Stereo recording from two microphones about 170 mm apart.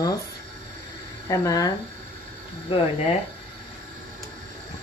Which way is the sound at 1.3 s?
20° left (ahead or behind).